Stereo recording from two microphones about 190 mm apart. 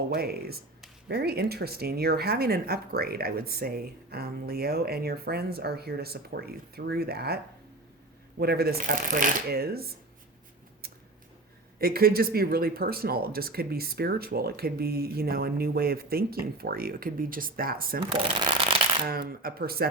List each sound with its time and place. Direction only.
0.1 s speech: 55° right (ahead or behind)
8.4 s speech: 55° right (ahead or behind)
11.8 s speech: 50° right (ahead or behind)
18.0 s speech: 25° right (ahead or behind)
19.0 s speech: 50° right (ahead or behind)